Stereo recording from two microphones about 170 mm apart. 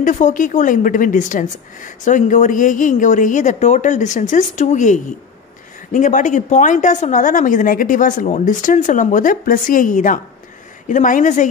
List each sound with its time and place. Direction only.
0.0 s a woman's voice: 50° left (ahead or behind)